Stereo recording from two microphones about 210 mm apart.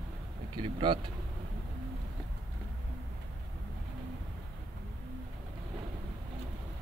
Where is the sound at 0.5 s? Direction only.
20° right (ahead or behind).